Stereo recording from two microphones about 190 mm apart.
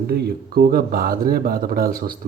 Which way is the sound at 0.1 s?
55° right (ahead or behind).